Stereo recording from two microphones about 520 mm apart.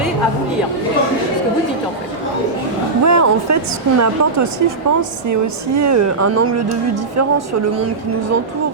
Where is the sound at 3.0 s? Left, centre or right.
Right.